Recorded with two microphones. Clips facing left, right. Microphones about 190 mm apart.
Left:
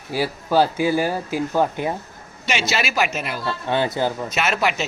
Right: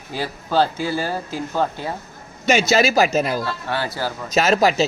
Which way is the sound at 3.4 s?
20° left (ahead or behind).